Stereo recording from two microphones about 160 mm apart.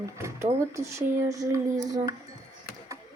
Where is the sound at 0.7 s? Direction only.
20° right (ahead or behind).